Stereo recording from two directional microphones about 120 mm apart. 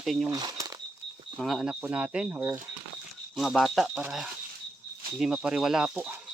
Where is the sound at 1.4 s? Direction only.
Centre (ahead or behind).